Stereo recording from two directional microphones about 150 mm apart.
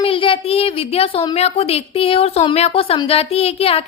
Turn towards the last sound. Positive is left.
turn(degrees=40)  # may be behind; listen again after turning